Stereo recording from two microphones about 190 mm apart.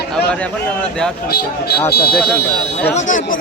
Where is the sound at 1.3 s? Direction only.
55° left (ahead or behind).